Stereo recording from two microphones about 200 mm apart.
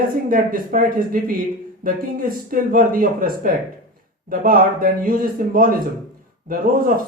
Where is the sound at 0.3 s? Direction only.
45° right (ahead or behind).